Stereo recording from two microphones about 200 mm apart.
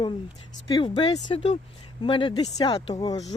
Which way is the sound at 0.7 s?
20° left (ahead or behind).